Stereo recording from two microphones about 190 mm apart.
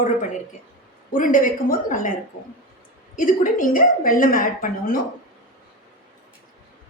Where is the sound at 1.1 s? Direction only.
45° left (ahead or behind).